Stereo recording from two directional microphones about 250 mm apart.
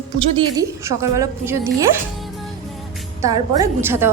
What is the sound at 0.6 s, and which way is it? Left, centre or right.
A woman's voice, centre.